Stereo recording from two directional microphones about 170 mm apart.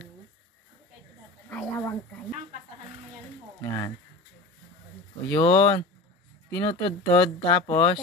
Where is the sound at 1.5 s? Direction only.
10° left (ahead or behind).